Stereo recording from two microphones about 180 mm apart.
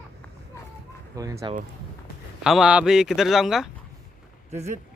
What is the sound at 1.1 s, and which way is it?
Speech, 20° right (ahead or behind).